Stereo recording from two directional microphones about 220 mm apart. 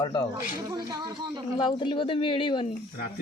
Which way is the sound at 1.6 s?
20° left (ahead or behind).